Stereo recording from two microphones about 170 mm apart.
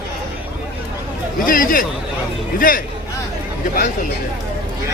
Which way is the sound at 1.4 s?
55° left (ahead or behind).